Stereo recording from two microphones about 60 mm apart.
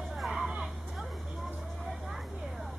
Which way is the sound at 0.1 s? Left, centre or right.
Centre.